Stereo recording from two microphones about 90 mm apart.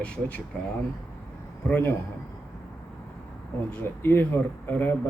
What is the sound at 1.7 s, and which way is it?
Speech, 20° left (ahead or behind).